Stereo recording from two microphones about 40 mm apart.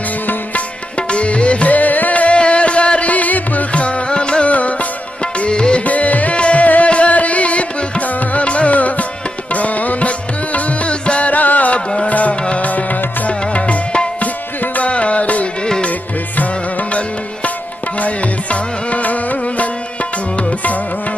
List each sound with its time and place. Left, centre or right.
1.1 s music: left
3.7 s music: left
5.9 s music: left
18.0 s music: left